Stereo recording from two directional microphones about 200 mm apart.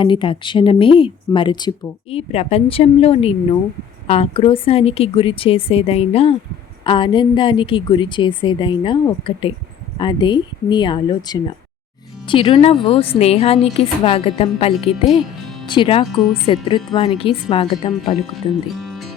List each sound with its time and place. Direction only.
0.0 s speech: 25° left (ahead or behind)
18.8 s music: centre (ahead or behind)